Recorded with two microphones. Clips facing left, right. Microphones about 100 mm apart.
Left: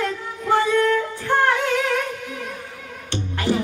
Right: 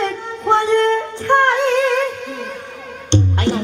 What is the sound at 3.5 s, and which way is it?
Music, 25° right (ahead or behind).